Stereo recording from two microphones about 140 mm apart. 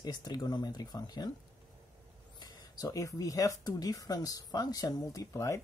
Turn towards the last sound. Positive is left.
turn(degrees=20)  # may be behind; listen again after turning